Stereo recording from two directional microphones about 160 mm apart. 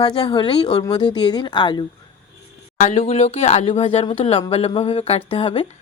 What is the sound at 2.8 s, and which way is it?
Speech, 45° left (ahead or behind).